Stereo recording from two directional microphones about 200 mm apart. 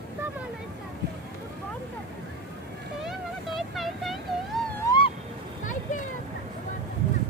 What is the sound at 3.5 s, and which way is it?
Vehicle, centre (ahead or behind).